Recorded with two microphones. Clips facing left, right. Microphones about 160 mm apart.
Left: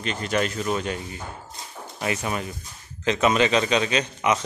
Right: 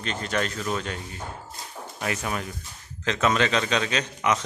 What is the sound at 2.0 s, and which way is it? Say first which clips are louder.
A man's voice: left 2 dB; 5° left (ahead or behind).